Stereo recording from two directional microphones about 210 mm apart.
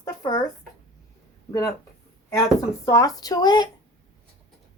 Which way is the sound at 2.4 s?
15° left (ahead or behind).